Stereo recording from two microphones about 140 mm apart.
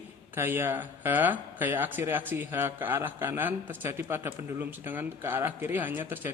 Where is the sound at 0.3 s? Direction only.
15° right (ahead or behind).